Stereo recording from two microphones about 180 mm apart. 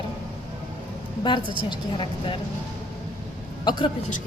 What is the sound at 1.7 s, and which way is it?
Speech, 25° left (ahead or behind).